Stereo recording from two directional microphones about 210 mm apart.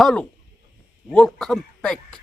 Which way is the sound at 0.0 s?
Centre (ahead or behind).